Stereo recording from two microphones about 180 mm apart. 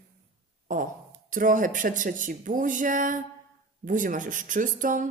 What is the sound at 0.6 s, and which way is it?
Speech, 45° right (ahead or behind).